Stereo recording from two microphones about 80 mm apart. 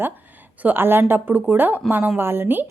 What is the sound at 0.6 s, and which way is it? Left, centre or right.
A woman's voice, right.